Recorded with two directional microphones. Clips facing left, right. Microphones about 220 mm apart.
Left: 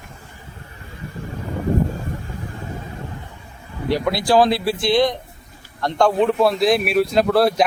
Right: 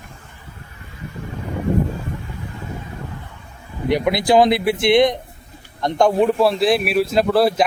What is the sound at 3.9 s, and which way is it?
A man's voice, 20° right (ahead or behind).